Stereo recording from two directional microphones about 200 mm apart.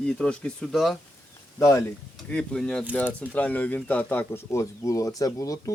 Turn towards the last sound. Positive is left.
turn(degrees=15)  # may be behind; listen again after turning